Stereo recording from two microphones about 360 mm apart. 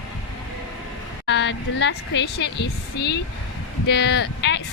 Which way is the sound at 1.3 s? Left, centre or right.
Left.